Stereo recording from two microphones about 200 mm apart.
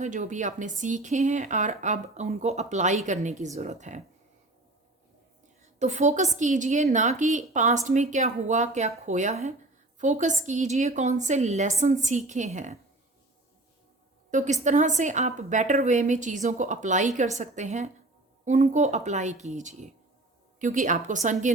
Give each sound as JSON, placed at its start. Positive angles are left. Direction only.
{"t": 0.0, "sound": "speech", "side_deg": -40}
{"t": 5.8, "sound": "speech", "side_deg": -35}
{"t": 14.3, "sound": "speech", "side_deg": -35}